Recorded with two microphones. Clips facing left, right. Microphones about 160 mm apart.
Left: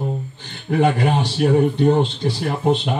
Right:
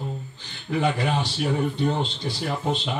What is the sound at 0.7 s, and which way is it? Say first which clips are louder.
Speech: left 6 dB; 55° left (ahead or behind).